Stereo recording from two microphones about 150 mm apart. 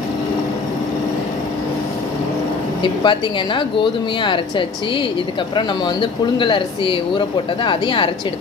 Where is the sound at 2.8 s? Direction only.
35° left (ahead or behind).